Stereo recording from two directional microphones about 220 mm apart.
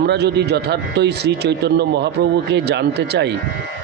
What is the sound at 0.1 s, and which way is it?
Speech, 50° right (ahead or behind).